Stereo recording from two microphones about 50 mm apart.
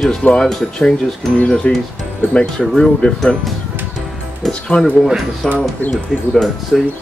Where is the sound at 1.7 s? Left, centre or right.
Left.